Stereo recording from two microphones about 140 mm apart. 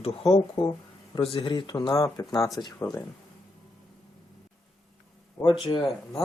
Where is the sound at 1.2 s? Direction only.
40° left (ahead or behind).